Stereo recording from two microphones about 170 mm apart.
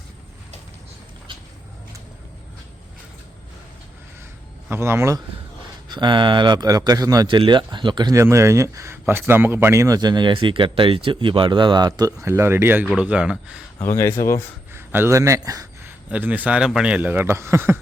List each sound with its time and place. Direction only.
4.7 s speech: 15° right (ahead or behind)
5.9 s speech: 25° right (ahead or behind); by 13.6 s 5° right (ahead or behind)
13.7 s speech: 15° left (ahead or behind)
14.7 s a sound: 15° right (ahead or behind)
16.0 s speech: 10° right (ahead or behind)